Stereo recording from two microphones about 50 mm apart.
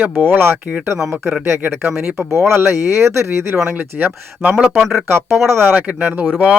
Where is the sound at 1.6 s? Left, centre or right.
Right.